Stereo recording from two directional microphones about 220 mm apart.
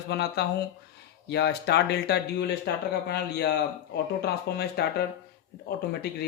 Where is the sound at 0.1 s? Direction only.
50° left (ahead or behind).